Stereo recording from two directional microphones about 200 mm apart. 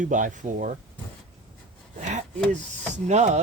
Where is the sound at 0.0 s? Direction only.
40° right (ahead or behind).